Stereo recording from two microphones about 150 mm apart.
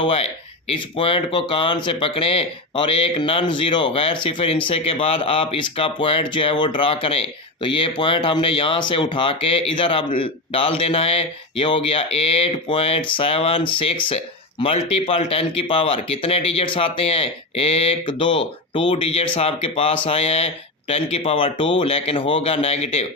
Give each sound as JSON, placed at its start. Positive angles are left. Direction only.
{"t": 0.0, "sound": "speech", "side_deg": 40}